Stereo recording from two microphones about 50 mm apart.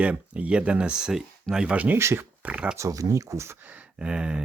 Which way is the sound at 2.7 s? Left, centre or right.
Right.